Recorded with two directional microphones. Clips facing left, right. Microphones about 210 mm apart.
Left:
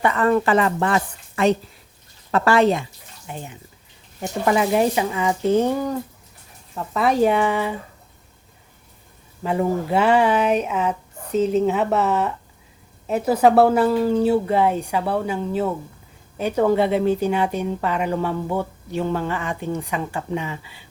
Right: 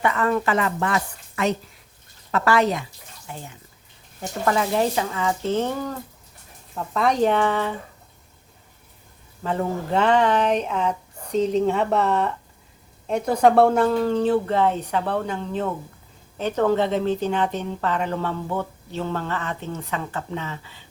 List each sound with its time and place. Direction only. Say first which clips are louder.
0.0 s a woman's voice: left 3 dB; 35° left (ahead or behind); by 7.8 s 10° left (ahead or behind)
9.4 s a woman's voice: left 4 dB; 10° left (ahead or behind)